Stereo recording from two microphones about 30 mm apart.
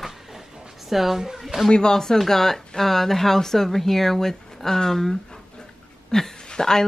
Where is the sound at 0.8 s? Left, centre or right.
Centre.